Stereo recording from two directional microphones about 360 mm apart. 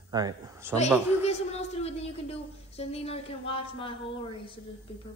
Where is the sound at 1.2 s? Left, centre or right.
Centre.